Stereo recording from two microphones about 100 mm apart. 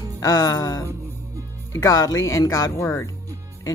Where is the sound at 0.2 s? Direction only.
40° left (ahead or behind).